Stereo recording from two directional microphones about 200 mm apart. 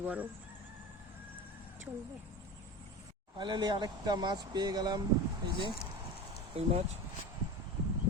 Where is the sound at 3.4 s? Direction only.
20° right (ahead or behind).